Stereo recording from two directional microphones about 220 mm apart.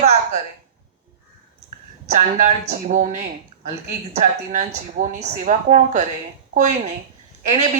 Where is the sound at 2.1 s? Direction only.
35° right (ahead or behind).